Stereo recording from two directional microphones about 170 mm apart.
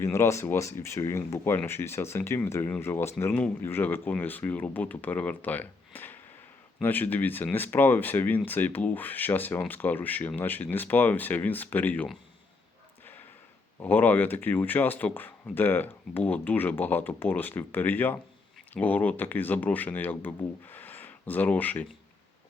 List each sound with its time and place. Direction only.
0.0 s speech: 15° left (ahead or behind)
13.7 s speech: 10° left (ahead or behind)